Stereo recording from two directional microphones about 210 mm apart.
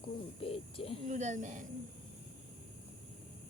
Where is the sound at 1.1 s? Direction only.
35° right (ahead or behind).